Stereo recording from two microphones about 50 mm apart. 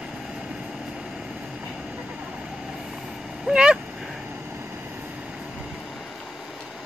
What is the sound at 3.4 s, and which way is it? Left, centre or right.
Speech, centre.